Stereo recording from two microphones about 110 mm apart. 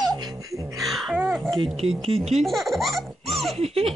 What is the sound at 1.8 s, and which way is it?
Speech, 60° right (ahead or behind).